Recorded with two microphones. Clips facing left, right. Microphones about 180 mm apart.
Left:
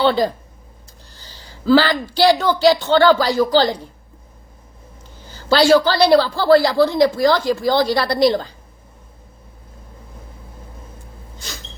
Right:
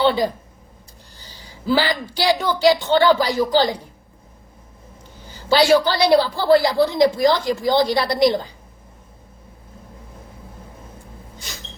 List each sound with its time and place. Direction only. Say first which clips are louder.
1.6 s a woman's voice: left 5 dB; 15° right (ahead or behind)
5.3 s a woman's voice: left 2 dB; 15° right (ahead or behind)